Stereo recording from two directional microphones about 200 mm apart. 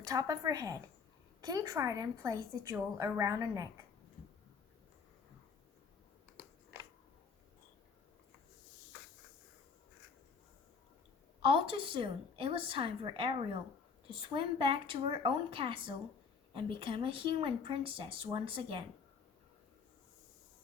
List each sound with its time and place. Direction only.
0.0 s a woman's voice: 15° right (ahead or behind)
11.4 s speech: 25° right (ahead or behind)